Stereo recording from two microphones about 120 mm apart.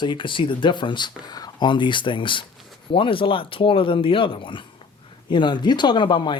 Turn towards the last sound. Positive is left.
turn(degrees=40)  # may be behind; listen again after turning